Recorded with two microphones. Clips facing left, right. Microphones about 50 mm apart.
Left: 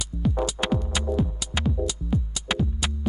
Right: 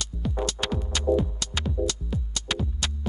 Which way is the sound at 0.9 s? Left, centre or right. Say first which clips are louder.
Right 2 dB; centre.